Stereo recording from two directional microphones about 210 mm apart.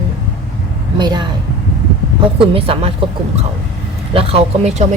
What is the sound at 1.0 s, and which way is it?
Speech, 20° right (ahead or behind).